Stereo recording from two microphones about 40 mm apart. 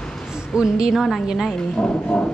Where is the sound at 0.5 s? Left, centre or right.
Centre.